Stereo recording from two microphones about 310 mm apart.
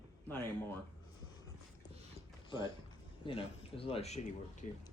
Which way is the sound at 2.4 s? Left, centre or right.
Centre.